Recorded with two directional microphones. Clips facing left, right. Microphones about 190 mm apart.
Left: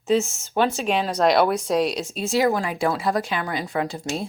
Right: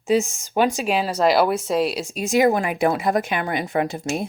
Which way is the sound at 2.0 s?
15° right (ahead or behind).